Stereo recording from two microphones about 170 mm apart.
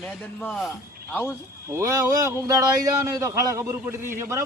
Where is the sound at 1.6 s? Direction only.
15° right (ahead or behind).